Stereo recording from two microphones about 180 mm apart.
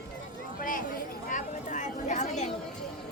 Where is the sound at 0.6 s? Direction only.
50° left (ahead or behind).